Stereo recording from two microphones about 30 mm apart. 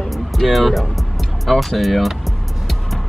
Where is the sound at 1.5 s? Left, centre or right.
Centre.